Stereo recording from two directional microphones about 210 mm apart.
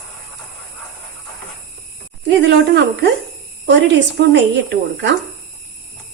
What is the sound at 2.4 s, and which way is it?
Speech, 55° right (ahead or behind).